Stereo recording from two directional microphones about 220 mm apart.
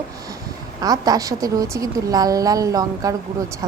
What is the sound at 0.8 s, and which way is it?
A woman's voice, 15° right (ahead or behind).